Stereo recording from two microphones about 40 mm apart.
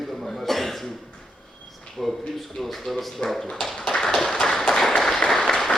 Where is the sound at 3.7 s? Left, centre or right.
Centre.